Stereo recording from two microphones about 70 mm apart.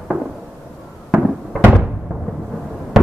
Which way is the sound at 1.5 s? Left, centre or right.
Centre.